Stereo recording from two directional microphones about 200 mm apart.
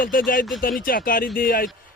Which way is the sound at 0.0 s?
45° left (ahead or behind).